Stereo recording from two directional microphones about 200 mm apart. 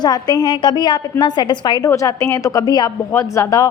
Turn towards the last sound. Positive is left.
turn(degrees=15)  # may be behind; listen again after turning